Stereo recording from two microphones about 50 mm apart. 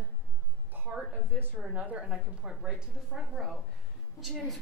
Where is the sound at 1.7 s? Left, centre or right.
Right.